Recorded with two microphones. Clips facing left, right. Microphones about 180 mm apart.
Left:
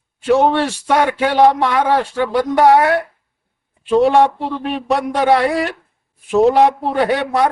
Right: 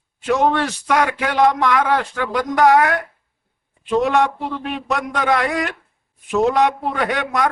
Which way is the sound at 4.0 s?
30° left (ahead or behind).